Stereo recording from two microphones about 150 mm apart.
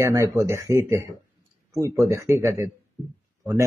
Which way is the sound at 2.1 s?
20° right (ahead or behind).